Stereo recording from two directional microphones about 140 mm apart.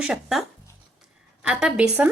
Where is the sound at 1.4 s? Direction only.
5° right (ahead or behind).